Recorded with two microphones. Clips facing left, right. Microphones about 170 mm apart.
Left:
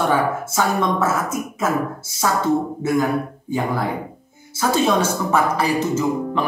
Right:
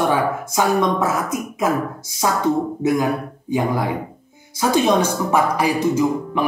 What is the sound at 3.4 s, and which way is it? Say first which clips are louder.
Speech: right 4 dB; 15° right (ahead or behind).